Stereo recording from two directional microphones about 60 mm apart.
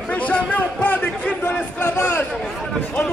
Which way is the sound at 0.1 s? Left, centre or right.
Left.